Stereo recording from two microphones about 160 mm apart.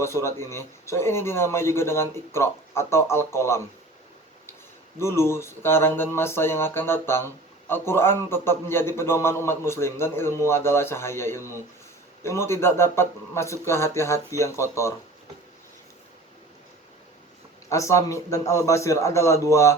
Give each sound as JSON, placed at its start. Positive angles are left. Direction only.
{"t": 0.0, "sound": "a man's voice", "side_deg": 15}
{"t": 4.9, "sound": "a man's voice", "side_deg": 15}
{"t": 17.7, "sound": "a man's voice", "side_deg": 20}